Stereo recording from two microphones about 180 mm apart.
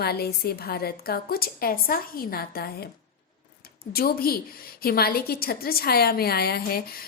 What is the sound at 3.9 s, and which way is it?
A woman's voice, 55° left (ahead or behind).